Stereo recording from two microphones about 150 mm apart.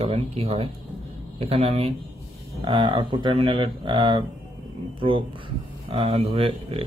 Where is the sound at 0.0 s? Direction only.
40° right (ahead or behind).